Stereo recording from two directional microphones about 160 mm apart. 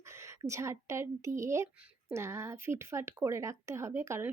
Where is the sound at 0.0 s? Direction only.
15° right (ahead or behind).